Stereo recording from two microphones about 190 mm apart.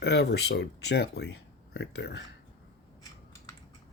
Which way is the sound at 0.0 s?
60° left (ahead or behind).